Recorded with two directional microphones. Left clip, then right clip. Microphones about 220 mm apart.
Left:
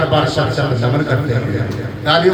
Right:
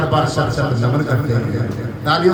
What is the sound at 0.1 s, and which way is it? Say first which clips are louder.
Speech: left 2 dB; 50° right (ahead or behind).